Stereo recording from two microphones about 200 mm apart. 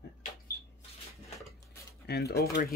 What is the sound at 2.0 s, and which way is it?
Speech, 55° left (ahead or behind).